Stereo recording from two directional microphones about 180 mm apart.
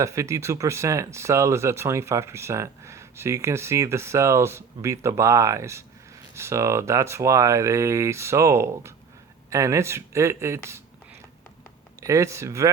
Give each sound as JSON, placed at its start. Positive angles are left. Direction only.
{"t": 0.0, "sound": "speech", "side_deg": -15}
{"t": 11.9, "sound": "speech", "side_deg": -15}